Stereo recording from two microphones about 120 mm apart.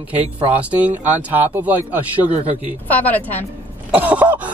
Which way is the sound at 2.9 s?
15° left (ahead or behind).